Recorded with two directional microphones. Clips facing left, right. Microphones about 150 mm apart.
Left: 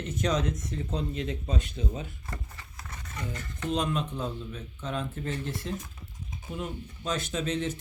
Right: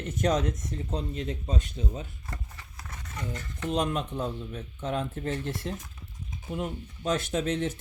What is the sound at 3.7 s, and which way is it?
Speech, 50° right (ahead or behind).